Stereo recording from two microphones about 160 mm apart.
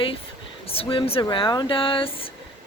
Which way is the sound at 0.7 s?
35° left (ahead or behind).